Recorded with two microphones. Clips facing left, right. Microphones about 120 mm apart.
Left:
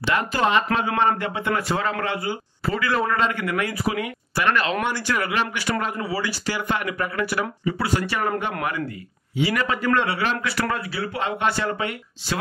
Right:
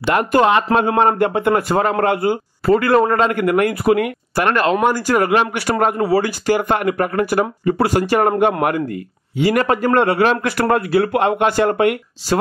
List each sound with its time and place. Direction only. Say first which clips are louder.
0.0 s a man's voice: right 7 dB; 55° right (ahead or behind)